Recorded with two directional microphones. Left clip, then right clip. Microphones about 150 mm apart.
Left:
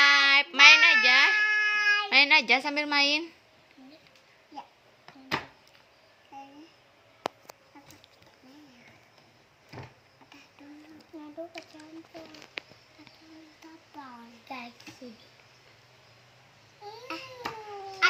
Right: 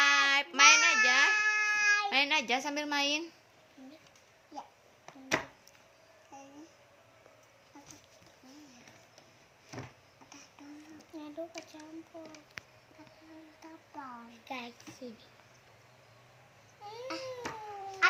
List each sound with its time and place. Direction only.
0.0 s child singing: 15° left (ahead or behind)
6.3 s babbling: 15° left (ahead or behind)